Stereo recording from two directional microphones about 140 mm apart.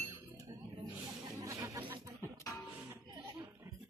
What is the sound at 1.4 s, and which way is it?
Music, 25° right (ahead or behind).